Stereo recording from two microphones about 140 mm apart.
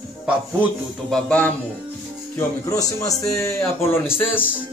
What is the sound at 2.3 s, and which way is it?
Speech, 25° left (ahead or behind).